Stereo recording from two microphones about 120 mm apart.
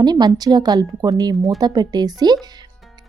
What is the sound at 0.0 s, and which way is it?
A woman's voice, 35° right (ahead or behind).